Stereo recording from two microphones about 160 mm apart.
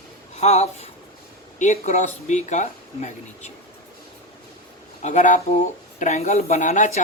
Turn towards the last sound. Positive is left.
turn(degrees=50)  # may be behind; listen again after turning